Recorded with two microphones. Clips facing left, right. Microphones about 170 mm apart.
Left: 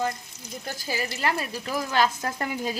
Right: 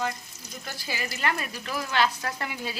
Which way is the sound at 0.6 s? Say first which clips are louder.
Left 4 dB; 45° left (ahead or behind).